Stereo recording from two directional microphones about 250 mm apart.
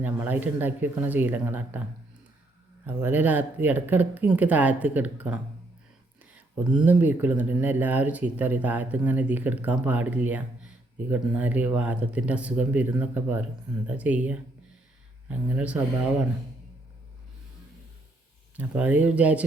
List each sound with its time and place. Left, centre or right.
0.0 s speech: centre
2.8 s speech: centre
18.5 s speech: centre